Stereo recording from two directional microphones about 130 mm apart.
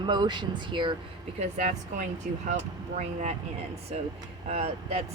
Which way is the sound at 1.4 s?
55° right (ahead or behind).